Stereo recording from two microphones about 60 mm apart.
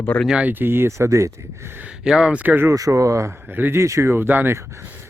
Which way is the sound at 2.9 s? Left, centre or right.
Right.